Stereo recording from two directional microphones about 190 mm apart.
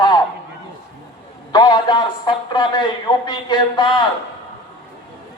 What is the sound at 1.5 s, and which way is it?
Mantra, 20° left (ahead or behind).